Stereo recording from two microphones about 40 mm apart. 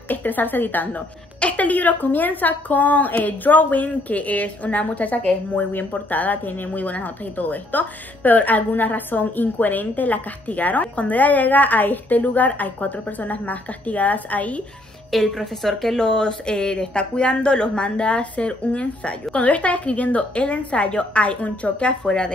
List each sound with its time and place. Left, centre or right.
0.1 s a woman's voice: left
5.7 s a woman's voice: left
15.0 s a woman's voice: centre
16.0 s a woman's voice: left
22.0 s speech: centre